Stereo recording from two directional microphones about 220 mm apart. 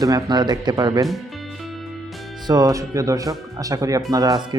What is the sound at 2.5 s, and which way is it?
Speech, 15° right (ahead or behind).